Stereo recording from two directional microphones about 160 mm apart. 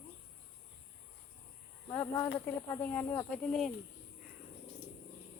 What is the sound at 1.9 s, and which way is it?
Snake, 20° left (ahead or behind).